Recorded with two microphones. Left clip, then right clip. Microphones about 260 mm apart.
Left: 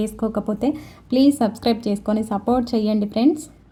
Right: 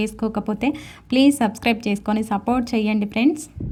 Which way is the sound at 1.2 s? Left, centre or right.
Right.